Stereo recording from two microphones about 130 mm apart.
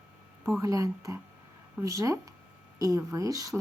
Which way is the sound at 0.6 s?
25° right (ahead or behind).